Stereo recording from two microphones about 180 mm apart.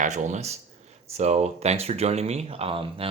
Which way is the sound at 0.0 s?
40° right (ahead or behind).